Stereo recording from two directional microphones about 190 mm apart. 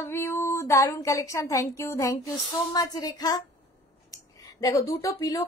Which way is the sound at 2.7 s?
20° left (ahead or behind).